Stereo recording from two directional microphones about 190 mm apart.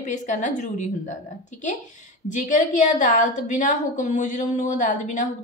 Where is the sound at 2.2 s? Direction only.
40° left (ahead or behind).